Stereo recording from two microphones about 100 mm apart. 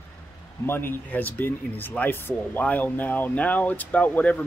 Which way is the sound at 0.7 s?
20° left (ahead or behind).